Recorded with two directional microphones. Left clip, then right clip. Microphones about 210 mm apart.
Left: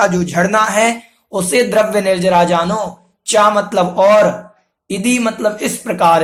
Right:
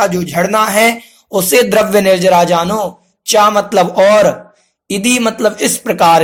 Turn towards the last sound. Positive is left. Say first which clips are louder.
# right 3 dB
turn(degrees=-35)  # may be behind; listen again after turning